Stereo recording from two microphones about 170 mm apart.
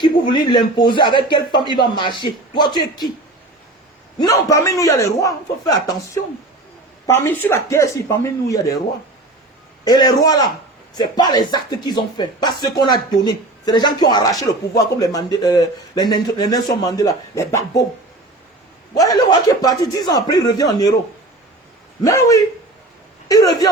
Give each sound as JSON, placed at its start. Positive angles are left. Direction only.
{"t": 0.0, "sound": "speech", "side_deg": 25}
{"t": 4.2, "sound": "speech", "side_deg": 20}
{"t": 9.8, "sound": "speech", "side_deg": 25}
{"t": 18.9, "sound": "speech", "side_deg": 20}
{"t": 22.0, "sound": "speech", "side_deg": 20}